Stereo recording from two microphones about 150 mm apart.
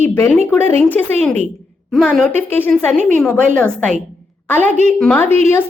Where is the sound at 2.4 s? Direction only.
15° left (ahead or behind).